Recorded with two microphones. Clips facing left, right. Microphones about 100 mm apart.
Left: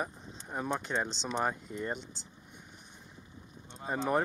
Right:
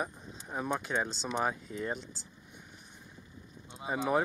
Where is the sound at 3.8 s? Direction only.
5° right (ahead or behind).